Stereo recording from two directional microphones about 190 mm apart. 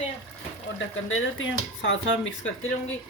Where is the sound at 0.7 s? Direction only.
85° left.